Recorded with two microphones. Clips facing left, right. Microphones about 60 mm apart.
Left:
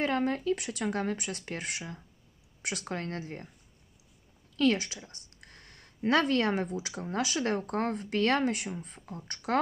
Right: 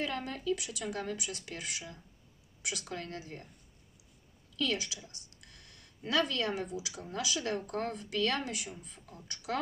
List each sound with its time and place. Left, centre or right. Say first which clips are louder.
0.0 s speech: left 7 dB; left
4.6 s speech: left 7 dB; left